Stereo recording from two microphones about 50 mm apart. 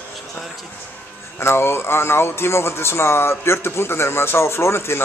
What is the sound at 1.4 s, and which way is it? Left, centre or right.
Speech, left.